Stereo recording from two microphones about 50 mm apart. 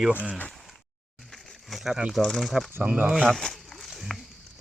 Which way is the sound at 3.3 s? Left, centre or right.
Centre.